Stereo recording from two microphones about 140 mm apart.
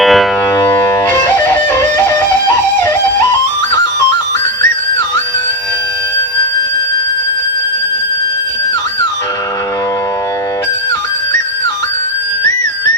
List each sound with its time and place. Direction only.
0.0 s music: centre (ahead or behind)
0.5 s music: 20° left (ahead or behind)